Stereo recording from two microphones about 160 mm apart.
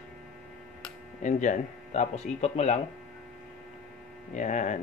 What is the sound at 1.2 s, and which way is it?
Speech, 50° left (ahead or behind).